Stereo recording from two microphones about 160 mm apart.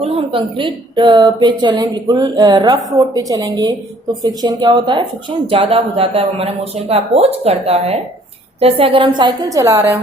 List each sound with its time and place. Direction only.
0.0 s speech: 35° right (ahead or behind); by 10.0 s 15° right (ahead or behind)